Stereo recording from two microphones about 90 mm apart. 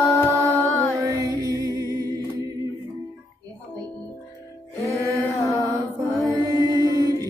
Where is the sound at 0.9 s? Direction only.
45° right (ahead or behind).